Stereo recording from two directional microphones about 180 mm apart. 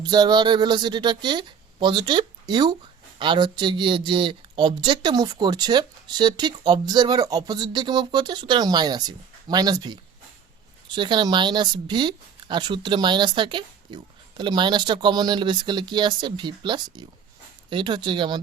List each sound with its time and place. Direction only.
0.0 s speech: 25° right (ahead or behind)